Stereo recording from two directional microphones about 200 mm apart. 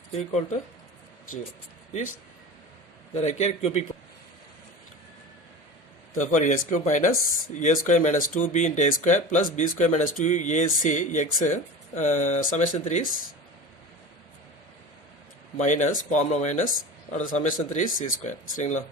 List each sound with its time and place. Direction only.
0.1 s speech: 35° left (ahead or behind)
1.9 s speech: 35° left (ahead or behind)
3.2 s speech: 35° left (ahead or behind)
6.1 s speech: 40° left (ahead or behind)
15.5 s speech: 35° left (ahead or behind)